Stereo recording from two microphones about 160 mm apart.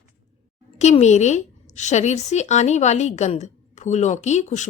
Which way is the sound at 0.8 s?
45° left (ahead or behind).